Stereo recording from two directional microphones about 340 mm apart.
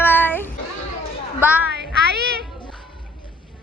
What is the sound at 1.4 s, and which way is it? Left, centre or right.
Speech, centre.